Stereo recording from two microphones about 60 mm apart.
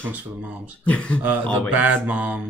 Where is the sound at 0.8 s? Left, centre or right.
Left.